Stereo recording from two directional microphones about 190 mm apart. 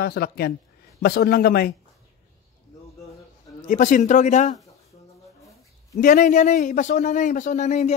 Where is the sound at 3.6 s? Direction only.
40° left (ahead or behind).